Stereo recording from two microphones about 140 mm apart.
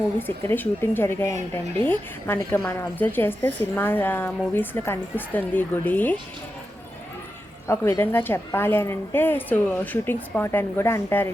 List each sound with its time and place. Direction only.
0.2 s a woman's voice: 15° left (ahead or behind)
7.7 s a woman's voice: 20° left (ahead or behind)